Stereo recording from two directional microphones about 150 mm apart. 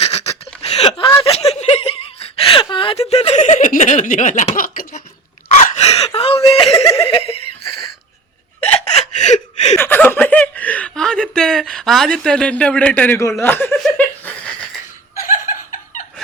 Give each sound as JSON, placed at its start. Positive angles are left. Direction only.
{"t": 0.0, "sound": "a sound", "side_deg": 45}
{"t": 1.2, "sound": "chuckle", "side_deg": 40}
{"t": 4.5, "sound": "a sound", "side_deg": 70}
{"t": 5.7, "sound": "gasp", "side_deg": 45}
{"t": 6.1, "sound": "whimper", "side_deg": 40}
{"t": 6.8, "sound": "giggle", "side_deg": 40}
{"t": 8.6, "sound": "a sound", "side_deg": 45}
{"t": 9.7, "sound": "chuckle", "side_deg": 15}
{"t": 13.4, "sound": "speech", "side_deg": 10}
{"t": 13.8, "sound": "laughter", "side_deg": 10}
{"t": 15.4, "sound": "snicker", "side_deg": 60}